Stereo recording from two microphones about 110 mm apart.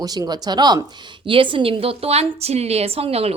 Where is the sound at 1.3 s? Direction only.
50° right (ahead or behind).